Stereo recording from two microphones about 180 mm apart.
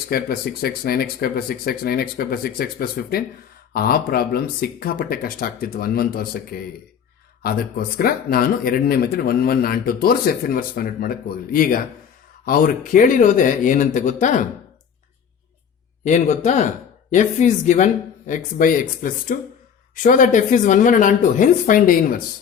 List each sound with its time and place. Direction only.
0.1 s speech: 60° left (ahead or behind)
7.9 s speech: 55° left (ahead or behind)
16.0 s speech: 40° left (ahead or behind)